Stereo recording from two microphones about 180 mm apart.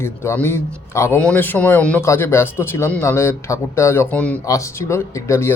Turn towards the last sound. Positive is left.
turn(degrees=15)  # may be behind; listen again after turning